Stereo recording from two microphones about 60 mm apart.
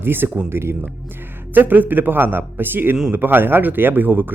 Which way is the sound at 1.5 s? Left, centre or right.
Right.